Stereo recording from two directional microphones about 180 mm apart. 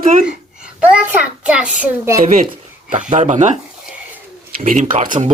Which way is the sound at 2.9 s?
40° right (ahead or behind).